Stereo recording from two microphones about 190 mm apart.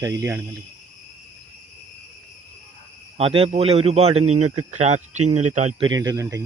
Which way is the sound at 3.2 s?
30° right (ahead or behind).